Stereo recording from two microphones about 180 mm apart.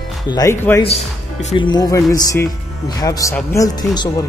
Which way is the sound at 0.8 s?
35° left (ahead or behind).